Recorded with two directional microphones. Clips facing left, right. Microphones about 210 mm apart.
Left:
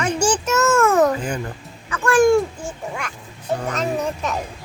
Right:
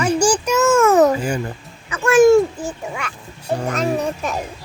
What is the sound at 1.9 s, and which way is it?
Speech, 20° right (ahead or behind).